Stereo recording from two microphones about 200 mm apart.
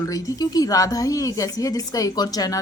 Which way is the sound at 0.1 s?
20° left (ahead or behind).